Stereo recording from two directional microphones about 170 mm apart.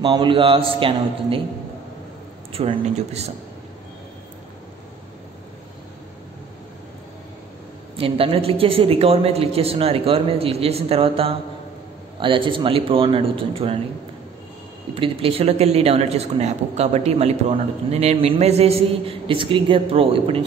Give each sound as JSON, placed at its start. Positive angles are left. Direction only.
{"t": 0.0, "sound": "speech", "side_deg": -30}
{"t": 2.5, "sound": "speech", "side_deg": -35}
{"t": 8.0, "sound": "speech", "side_deg": -35}
{"t": 15.0, "sound": "speech", "side_deg": -35}